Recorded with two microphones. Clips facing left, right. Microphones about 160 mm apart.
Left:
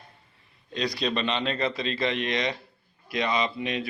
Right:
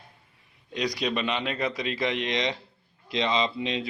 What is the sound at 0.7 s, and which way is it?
A man's voice, 15° right (ahead or behind).